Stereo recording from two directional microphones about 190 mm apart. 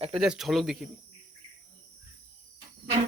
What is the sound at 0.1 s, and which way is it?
Speech, 5° right (ahead or behind).